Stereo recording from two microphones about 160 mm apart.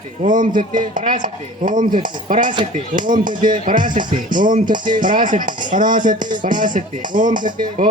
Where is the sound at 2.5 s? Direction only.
30° right (ahead or behind).